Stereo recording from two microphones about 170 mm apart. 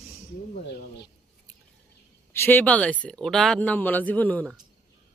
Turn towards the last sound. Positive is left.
turn(degrees=10)  # may be behind; listen again after turning